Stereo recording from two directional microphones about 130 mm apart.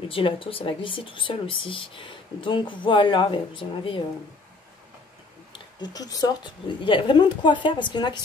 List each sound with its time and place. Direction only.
0.1 s speech: 45° left (ahead or behind)
5.5 s speech: 30° left (ahead or behind)